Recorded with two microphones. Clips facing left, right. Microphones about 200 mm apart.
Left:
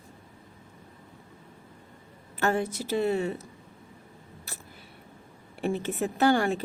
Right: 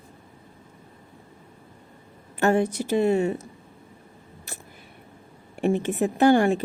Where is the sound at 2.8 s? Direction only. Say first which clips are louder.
Right 4 dB; 50° right (ahead or behind).